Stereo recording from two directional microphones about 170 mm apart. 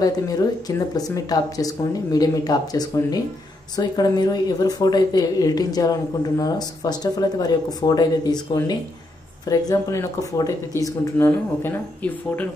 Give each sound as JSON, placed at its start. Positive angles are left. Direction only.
{"t": 0.0, "sound": "speech", "side_deg": 20}